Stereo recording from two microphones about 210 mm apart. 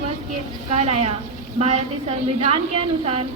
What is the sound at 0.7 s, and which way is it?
A woman's voice, 30° right (ahead or behind).